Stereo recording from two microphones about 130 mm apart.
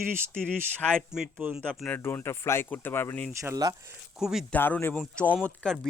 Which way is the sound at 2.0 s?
15° left (ahead or behind).